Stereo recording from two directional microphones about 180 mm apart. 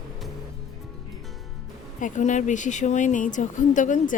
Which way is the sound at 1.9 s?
45° left (ahead or behind).